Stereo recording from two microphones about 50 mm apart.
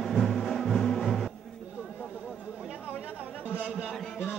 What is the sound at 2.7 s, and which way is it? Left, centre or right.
Chatter, right.